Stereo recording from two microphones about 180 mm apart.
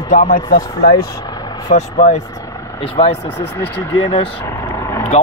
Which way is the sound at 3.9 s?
30° left (ahead or behind).